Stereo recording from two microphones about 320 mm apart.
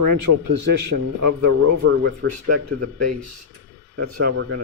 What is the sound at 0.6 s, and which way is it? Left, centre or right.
A man's voice, right.